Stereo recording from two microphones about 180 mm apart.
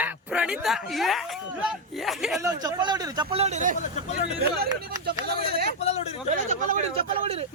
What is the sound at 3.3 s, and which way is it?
Speech, 35° right (ahead or behind).